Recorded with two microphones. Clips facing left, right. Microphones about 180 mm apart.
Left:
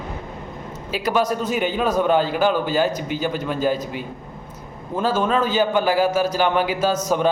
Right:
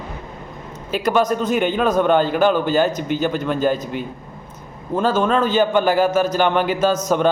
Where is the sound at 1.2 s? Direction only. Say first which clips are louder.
Right 3 dB; 50° right (ahead or behind).